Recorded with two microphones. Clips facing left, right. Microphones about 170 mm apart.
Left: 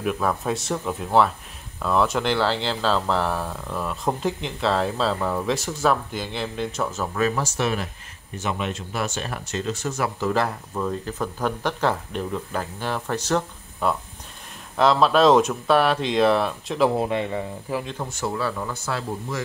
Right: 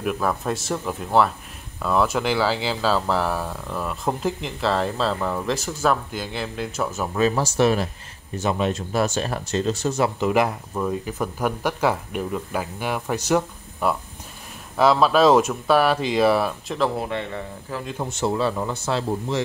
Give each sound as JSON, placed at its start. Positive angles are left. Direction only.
{"t": 0.0, "sound": "speech", "side_deg": 0}
{"t": 7.2, "sound": "speech", "side_deg": -30}
{"t": 10.7, "sound": "speech", "side_deg": -10}
{"t": 17.0, "sound": "speech", "side_deg": 15}
{"t": 18.1, "sound": "speech", "side_deg": -25}